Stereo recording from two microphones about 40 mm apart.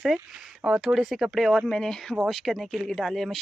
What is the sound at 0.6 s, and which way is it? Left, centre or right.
Speech, centre.